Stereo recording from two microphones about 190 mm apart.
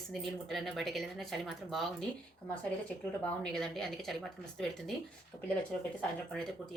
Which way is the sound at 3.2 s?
5° left (ahead or behind).